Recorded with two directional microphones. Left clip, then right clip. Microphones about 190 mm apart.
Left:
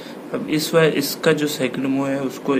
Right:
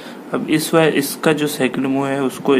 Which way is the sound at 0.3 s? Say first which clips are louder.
Right 3 dB; 45° right (ahead or behind).